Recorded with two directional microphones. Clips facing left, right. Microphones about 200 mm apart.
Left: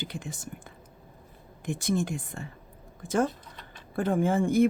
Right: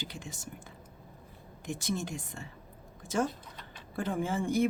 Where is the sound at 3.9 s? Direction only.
55° left (ahead or behind).